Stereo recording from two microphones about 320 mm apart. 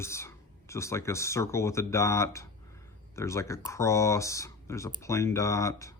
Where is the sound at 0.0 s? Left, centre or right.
Centre.